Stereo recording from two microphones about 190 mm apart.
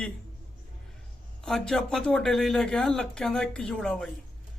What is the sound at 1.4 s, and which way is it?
A man's voice, 5° left (ahead or behind).